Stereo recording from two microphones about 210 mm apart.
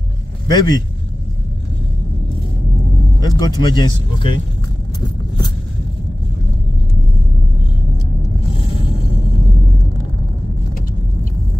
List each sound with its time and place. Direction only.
0.5 s a man's voice: 20° left (ahead or behind)
3.2 s speech: 20° left (ahead or behind)